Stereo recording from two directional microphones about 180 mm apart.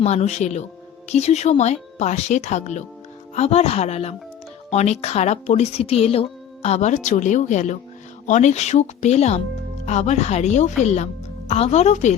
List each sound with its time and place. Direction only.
0.0 s a woman's voice: 40° left (ahead or behind)